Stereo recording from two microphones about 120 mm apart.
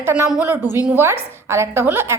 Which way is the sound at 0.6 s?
30° left (ahead or behind).